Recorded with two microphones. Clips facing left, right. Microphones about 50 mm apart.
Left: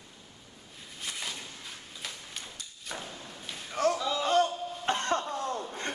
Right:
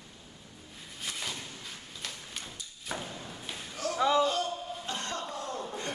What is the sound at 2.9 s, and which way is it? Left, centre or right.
Thump, centre.